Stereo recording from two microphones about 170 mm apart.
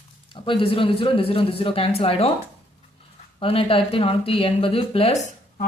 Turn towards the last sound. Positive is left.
turn(degrees=40)  # may be behind; listen again after turning